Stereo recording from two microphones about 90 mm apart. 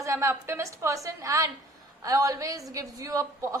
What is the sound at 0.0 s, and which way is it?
A woman's voice, 35° right (ahead or behind).